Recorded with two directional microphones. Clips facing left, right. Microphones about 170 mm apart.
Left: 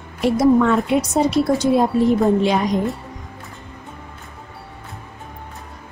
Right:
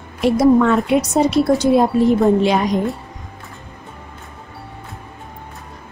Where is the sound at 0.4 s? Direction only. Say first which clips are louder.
Right 2 dB; 70° right (ahead or behind).